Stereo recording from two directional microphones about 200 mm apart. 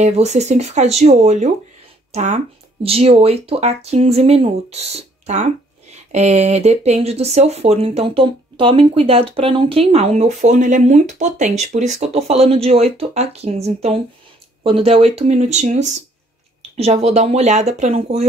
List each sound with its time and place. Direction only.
0.0 s speech: 35° right (ahead or behind)